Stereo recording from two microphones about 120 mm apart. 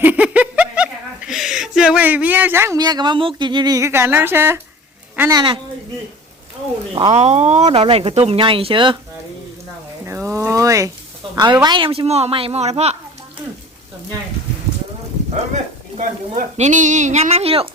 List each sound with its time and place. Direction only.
0.0 s a sound: 15° right (ahead or behind)
2.7 s speech: 35° right (ahead or behind); by 4.6 s 20° right (ahead or behind)
5.3 s speech: 40° right (ahead or behind)
7.1 s speech: 60° right (ahead or behind)
8.4 s speech: 45° right (ahead or behind)
10.1 s speech: 20° right (ahead or behind)
11.6 s speech: 40° right (ahead or behind)
11.9 s speech: 55° right (ahead or behind)
15.3 s a woman's voice: 80° right; by 17.7 s 55° right (ahead or behind)